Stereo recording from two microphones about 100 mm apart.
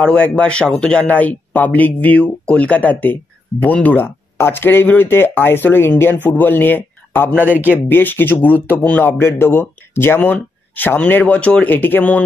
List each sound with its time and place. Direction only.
0.0 s speech: 10° left (ahead or behind)
7.4 s speech: 15° right (ahead or behind)
7.7 s speech: 20° left (ahead or behind)